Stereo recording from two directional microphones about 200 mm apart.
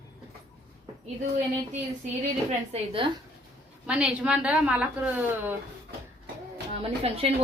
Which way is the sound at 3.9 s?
5° right (ahead or behind).